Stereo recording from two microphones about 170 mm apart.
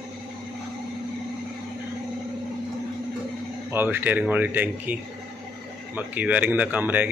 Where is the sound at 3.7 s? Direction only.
15° right (ahead or behind).